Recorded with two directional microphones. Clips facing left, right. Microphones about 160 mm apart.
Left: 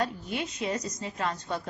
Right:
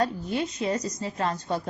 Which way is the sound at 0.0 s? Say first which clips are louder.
Right 5 dB; 35° right (ahead or behind).